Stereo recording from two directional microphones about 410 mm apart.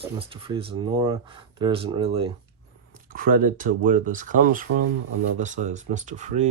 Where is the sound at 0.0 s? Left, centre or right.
Centre.